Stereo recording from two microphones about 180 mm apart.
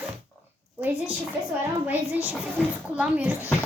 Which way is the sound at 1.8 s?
10° right (ahead or behind).